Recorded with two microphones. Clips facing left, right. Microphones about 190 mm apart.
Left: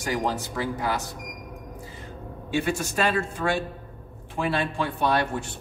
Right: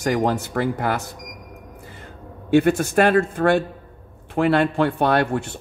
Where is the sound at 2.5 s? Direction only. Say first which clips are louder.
Right 10 dB; 55° right (ahead or behind).